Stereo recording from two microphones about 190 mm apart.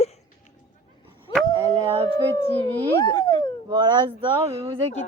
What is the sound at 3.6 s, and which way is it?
Speech, 25° right (ahead or behind).